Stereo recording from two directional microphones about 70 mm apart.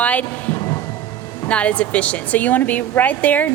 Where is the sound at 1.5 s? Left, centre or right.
Centre.